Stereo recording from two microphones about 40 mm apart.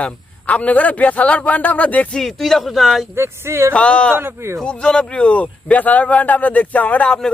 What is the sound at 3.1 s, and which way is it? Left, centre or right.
Speech, right.